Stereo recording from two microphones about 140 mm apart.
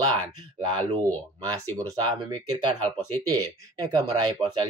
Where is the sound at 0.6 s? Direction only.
35° right (ahead or behind).